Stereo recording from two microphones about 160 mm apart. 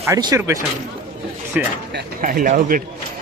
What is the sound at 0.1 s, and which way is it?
A man's voice, 20° right (ahead or behind).